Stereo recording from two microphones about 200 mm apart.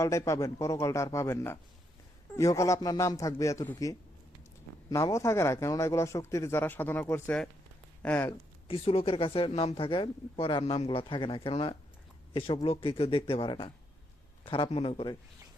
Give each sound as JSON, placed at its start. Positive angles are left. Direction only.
{"t": 0.0, "sound": "speech", "side_deg": 15}
{"t": 8.6, "sound": "speech", "side_deg": 30}